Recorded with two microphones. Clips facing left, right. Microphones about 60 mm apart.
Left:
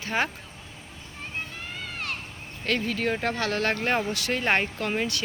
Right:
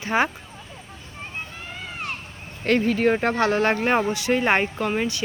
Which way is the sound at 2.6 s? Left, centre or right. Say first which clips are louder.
Right 7 dB; right.